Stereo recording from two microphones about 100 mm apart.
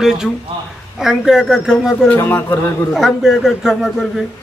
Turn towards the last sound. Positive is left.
turn(degrees=-5)  # may be behind; listen again after turning